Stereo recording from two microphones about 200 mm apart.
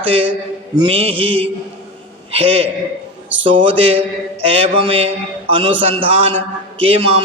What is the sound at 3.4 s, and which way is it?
A man's voice, 25° right (ahead or behind).